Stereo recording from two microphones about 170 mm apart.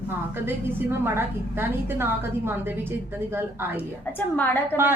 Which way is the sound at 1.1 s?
15° right (ahead or behind).